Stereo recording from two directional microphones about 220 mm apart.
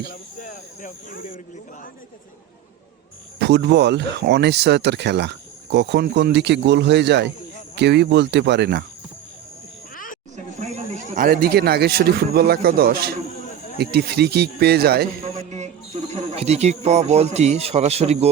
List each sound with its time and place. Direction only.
0.0 s cricket: 40° left (ahead or behind)
3.3 s speech: 50° right (ahead or behind)
9.9 s a sound: 40° left (ahead or behind)
10.3 s speech: 35° right (ahead or behind)
15.4 s speech: 30° right (ahead or behind)